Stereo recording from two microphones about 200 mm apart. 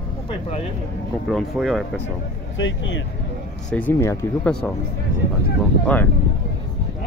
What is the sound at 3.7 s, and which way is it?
Speech, 10° left (ahead or behind).